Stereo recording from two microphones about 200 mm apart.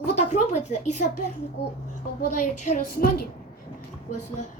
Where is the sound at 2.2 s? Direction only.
40° left (ahead or behind).